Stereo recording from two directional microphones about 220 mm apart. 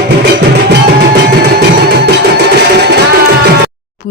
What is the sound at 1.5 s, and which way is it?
Music, 50° right (ahead or behind).